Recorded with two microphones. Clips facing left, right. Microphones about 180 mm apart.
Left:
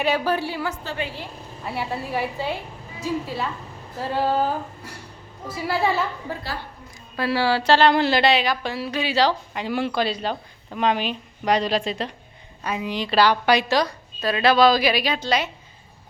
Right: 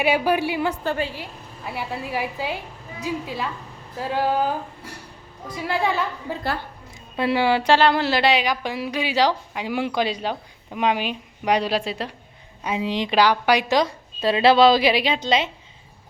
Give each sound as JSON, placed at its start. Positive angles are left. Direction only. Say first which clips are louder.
{"t": 0.0, "sound": "speech", "louder": "right 2 dB", "side_deg": -15}
{"t": 1.6, "sound": "a woman's voice", "louder": "left 1 dB", "side_deg": 0}
{"t": 6.3, "sound": "speech", "louder": "right 4 dB", "side_deg": -15}
{"t": 12.6, "sound": "a woman's voice", "louder": "right 2 dB", "side_deg": -25}